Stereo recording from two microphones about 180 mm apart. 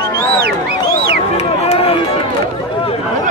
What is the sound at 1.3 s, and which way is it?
Run, 35° left (ahead or behind).